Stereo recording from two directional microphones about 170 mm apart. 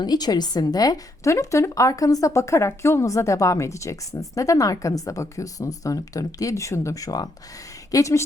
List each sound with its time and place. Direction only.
0.0 s a woman's voice: 25° left (ahead or behind)